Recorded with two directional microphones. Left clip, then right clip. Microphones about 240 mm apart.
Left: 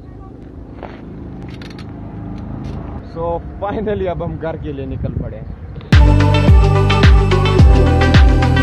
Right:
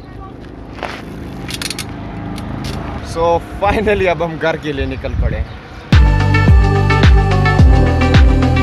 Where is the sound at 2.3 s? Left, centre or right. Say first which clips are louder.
Right 6 dB; left.